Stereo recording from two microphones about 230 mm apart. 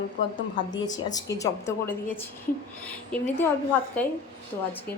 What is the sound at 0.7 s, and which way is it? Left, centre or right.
A woman's voice, centre.